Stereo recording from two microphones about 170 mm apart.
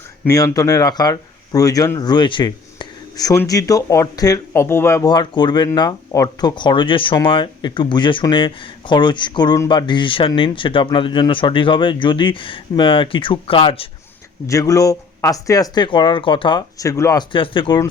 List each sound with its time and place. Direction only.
0.3 s speech: 20° left (ahead or behind)
14.4 s speech: 20° left (ahead or behind)
17.3 s speech: 30° left (ahead or behind)